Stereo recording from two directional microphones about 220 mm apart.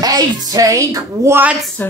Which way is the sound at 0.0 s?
15° right (ahead or behind).